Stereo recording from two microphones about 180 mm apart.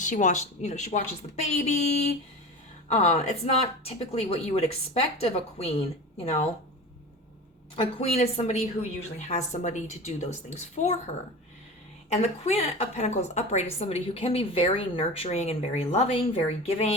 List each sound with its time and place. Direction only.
0.0 s a woman's voice: 45° left (ahead or behind)
2.9 s a woman's voice: 35° left (ahead or behind)
7.8 s a woman's voice: 35° left (ahead or behind)